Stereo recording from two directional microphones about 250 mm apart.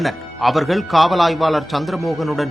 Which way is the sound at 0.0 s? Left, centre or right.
Centre.